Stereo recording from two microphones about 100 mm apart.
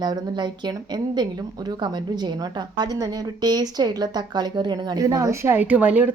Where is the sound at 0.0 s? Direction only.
45° right (ahead or behind).